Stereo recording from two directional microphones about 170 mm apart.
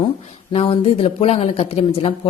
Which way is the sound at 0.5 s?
30° left (ahead or behind).